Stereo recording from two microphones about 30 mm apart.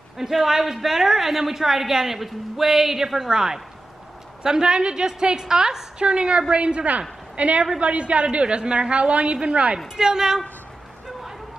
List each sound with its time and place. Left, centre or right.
0.2 s a woman's voice: centre
5.9 s a woman's voice: right
9.9 s a woman's voice: centre